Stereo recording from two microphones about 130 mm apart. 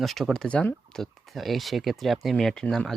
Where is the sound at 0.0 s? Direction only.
Centre (ahead or behind).